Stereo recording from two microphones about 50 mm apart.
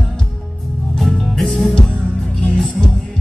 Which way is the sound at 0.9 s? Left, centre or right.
Centre.